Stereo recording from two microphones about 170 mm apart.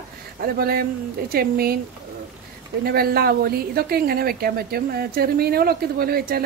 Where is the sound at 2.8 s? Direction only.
65° right (ahead or behind).